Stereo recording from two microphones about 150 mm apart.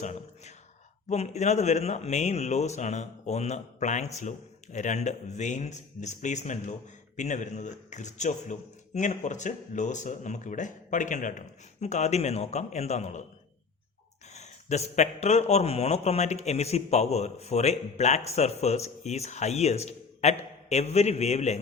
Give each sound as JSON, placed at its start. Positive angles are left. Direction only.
{"t": 0.0, "sound": "a sound", "side_deg": 50}
{"t": 1.1, "sound": "a man's voice", "side_deg": 45}
{"t": 14.3, "sound": "a man's voice", "side_deg": 50}